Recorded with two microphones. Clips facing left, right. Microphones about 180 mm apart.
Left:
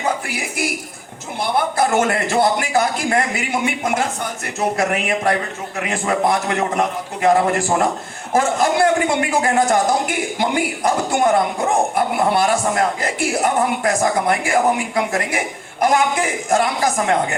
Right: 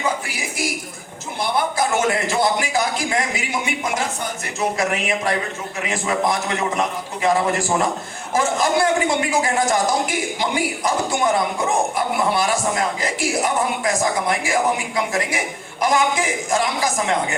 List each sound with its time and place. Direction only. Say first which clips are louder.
0.3 s a man's voice: left 2 dB; 60° left (ahead or behind)